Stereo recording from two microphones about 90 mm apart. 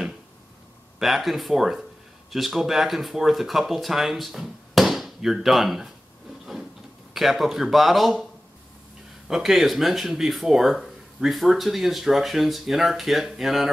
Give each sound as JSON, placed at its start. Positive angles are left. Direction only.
{"t": 0.9, "sound": "speech", "side_deg": 0}
{"t": 7.2, "sound": "speech", "side_deg": 0}
{"t": 9.3, "sound": "speech", "side_deg": -5}